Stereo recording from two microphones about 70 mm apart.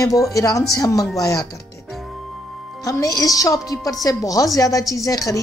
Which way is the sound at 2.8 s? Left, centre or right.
Left.